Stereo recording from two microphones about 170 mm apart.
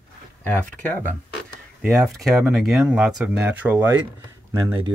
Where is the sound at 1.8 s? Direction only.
Centre (ahead or behind).